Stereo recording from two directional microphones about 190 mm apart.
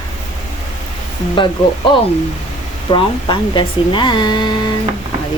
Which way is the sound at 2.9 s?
25° left (ahead or behind).